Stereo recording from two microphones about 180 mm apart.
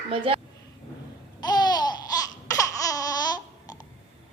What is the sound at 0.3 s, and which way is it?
Speech, 30° right (ahead or behind).